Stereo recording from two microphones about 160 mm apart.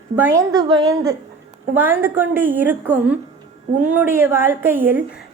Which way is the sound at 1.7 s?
15° right (ahead or behind).